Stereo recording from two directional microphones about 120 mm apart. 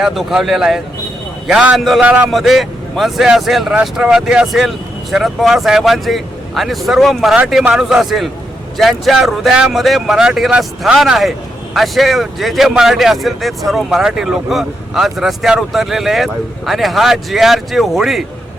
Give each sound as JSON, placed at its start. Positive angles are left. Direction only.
{"t": 0.0, "sound": "speech", "side_deg": 0}
{"t": 2.0, "sound": "speech", "side_deg": -15}
{"t": 2.3, "sound": "speech", "side_deg": 0}